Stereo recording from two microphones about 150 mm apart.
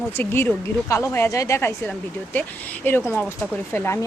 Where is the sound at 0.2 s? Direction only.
15° left (ahead or behind).